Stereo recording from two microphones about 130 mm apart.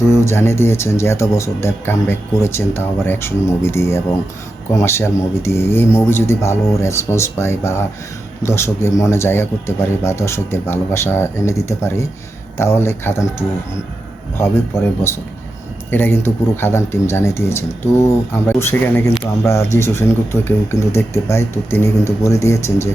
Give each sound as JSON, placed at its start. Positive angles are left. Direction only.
{"t": 0.1, "sound": "speech", "side_deg": 20}
{"t": 14.3, "sound": "speech", "side_deg": 20}